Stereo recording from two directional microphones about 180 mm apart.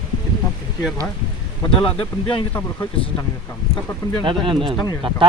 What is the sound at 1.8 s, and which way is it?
Speech, 30° left (ahead or behind).